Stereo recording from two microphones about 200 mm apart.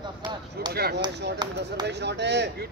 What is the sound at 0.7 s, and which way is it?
Speech, 50° right (ahead or behind).